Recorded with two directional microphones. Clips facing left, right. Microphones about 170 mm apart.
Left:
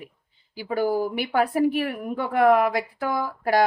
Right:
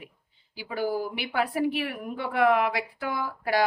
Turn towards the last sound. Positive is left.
turn(degrees=45)  # may be behind; listen again after turning